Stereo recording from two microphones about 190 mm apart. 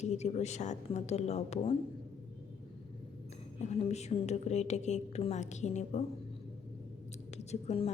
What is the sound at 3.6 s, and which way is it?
A woman's voice, 35° left (ahead or behind).